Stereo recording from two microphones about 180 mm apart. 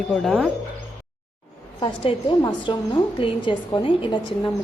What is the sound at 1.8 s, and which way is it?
A woman's voice, 30° left (ahead or behind).